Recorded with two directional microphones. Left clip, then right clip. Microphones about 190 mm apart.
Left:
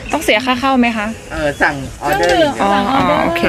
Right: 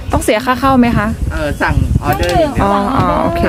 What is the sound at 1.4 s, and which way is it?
Speech, 10° right (ahead or behind).